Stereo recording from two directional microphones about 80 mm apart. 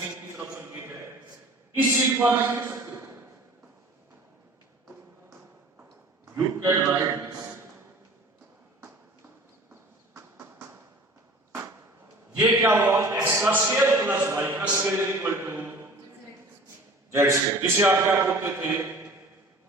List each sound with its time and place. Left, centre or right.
0.0 s a sound: right
1.7 s a man's voice: right
6.7 s a man's voice: right
12.5 s a man's voice: right
17.1 s a man's voice: right